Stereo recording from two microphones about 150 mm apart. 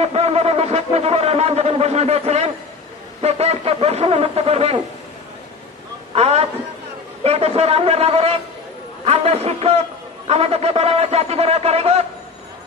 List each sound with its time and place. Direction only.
0.0 s a sound: 45° right (ahead or behind)
3.2 s a man's voice: 45° right (ahead or behind)
6.1 s a man's voice: 45° right (ahead or behind)